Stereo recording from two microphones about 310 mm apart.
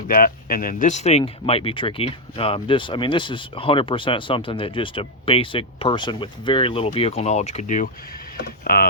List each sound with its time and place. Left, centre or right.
0.1 s speech: left